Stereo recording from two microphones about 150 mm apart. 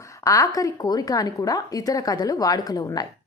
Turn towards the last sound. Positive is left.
turn(degrees=25)  # may be behind; listen again after turning